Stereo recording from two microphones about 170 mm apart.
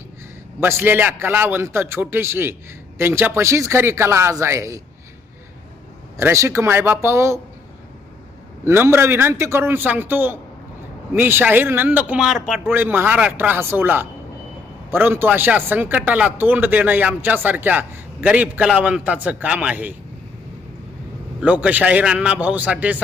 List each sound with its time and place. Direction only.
0.6 s a man's voice: 15° right (ahead or behind)
6.1 s a man's voice: 15° right (ahead or behind)
8.6 s a man's voice: 15° right (ahead or behind)
21.4 s a man's voice: 10° right (ahead or behind)